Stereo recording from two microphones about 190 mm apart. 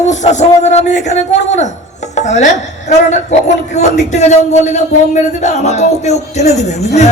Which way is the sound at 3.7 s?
35° left (ahead or behind).